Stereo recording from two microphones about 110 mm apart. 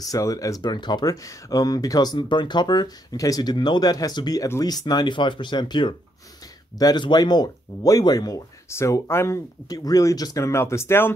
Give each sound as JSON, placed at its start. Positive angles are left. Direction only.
{"t": 0.0, "sound": "speech", "side_deg": 30}